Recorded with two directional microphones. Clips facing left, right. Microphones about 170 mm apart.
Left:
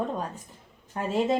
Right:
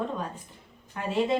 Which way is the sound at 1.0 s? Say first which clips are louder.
Left 2 dB; 35° left (ahead or behind).